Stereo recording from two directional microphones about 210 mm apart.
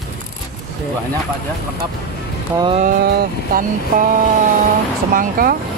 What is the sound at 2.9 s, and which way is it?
Vehicle, 45° right (ahead or behind).